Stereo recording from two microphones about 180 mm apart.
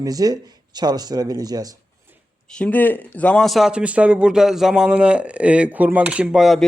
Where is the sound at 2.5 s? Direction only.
10° left (ahead or behind).